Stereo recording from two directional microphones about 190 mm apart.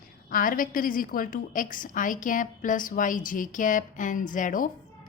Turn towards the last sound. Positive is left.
turn(degrees=45)  # may be behind; listen again after turning